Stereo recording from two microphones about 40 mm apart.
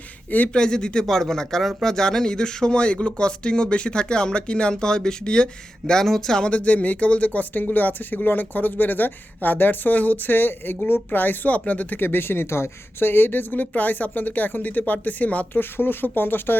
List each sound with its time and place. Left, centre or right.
0.3 s speech: left
0.5 s speech: centre
1.0 s speech: centre
6.5 s speech: left
11.9 s a woman's voice: left
15.5 s a woman's voice: left